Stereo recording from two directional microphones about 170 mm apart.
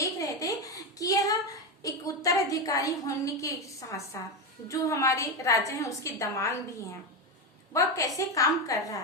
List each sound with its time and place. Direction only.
0.0 s a sound: 20° left (ahead or behind)
1.8 s a woman's voice: 20° left (ahead or behind)
7.7 s a woman's voice: 20° left (ahead or behind)